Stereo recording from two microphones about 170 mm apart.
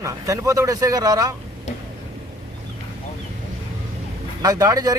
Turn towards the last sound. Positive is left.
turn(degrees=-20)  # may be behind; listen again after turning